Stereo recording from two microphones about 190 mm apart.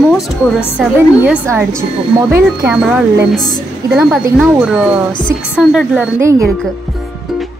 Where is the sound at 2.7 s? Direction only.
5° right (ahead or behind).